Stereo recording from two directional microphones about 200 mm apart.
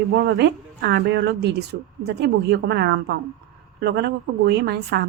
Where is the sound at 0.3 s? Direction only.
55° right (ahead or behind).